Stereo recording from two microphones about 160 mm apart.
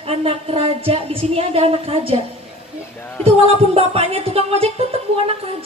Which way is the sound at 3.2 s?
35° right (ahead or behind).